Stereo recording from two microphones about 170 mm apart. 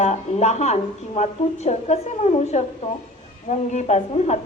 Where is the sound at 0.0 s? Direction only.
40° left (ahead or behind).